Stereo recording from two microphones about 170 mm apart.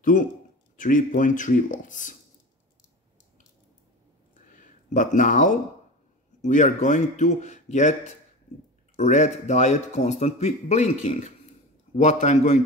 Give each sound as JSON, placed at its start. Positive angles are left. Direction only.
{"t": 0.0, "sound": "a man's voice", "side_deg": 50}
{"t": 4.5, "sound": "a sound", "side_deg": 50}
{"t": 6.4, "sound": "a man's voice", "side_deg": 45}
{"t": 8.9, "sound": "a man's voice", "side_deg": 45}